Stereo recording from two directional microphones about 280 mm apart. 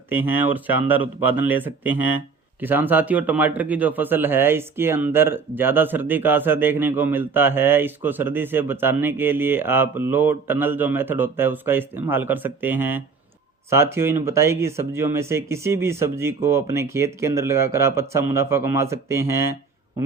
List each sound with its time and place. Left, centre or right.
0.1 s a man's voice: centre